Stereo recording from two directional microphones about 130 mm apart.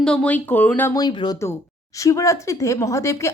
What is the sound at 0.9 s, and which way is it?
A woman's voice, 35° left (ahead or behind).